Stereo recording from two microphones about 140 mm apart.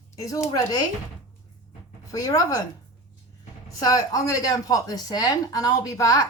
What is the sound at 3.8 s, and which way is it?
A woman's voice, 25° left (ahead or behind).